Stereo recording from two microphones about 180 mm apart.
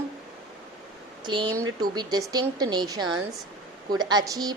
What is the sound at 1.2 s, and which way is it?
A woman's voice, 25° right (ahead or behind).